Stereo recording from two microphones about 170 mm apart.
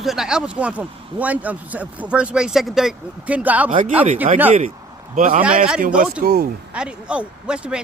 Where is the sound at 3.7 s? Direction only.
50° right (ahead or behind).